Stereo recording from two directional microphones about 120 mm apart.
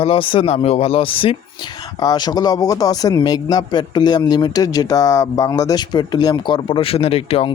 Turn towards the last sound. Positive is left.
turn(degrees=55)  # may be behind; listen again after turning